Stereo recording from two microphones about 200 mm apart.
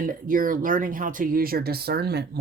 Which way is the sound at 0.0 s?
45° right (ahead or behind).